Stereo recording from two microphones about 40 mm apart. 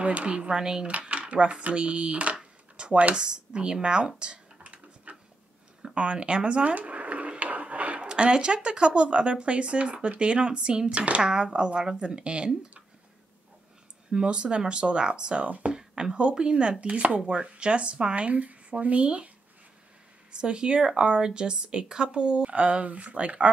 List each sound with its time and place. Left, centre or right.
0.0 s speech: right
0.6 s speech: centre
0.8 s speech: right
4.2 s computer keyboard: right
5.1 s a sound: right
5.9 s speech: right
6.7 s a sound: right
8.1 s speech: right
11.0 s speech: right
11.2 s speech: right
14.1 s speech: right
15.4 s speech: right
15.7 s speech: right
20.3 s speech: right